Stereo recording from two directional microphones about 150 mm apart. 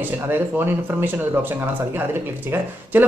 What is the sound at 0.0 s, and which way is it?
Speech, 15° right (ahead or behind).